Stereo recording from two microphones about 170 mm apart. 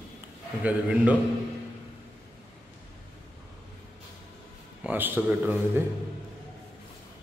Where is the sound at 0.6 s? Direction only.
10° right (ahead or behind).